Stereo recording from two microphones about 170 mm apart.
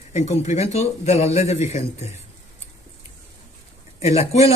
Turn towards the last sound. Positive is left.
turn(degrees=35)  # may be behind; listen again after turning